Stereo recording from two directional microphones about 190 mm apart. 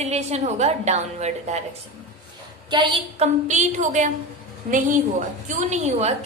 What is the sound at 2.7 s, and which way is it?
A woman's voice, 25° right (ahead or behind).